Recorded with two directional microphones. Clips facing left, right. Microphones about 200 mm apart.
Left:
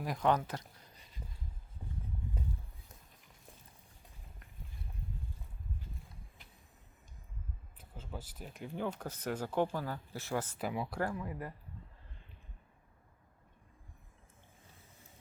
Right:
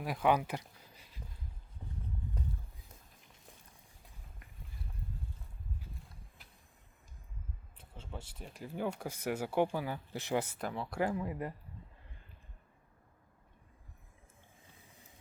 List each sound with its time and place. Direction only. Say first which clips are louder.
0.0 s speech: right 1 dB; 5° right (ahead or behind)
8.4 s speech: right 1 dB; centre (ahead or behind)
10.6 s speech: left 1 dB; 5° left (ahead or behind)
11.0 s speech: right 3 dB; 20° right (ahead or behind)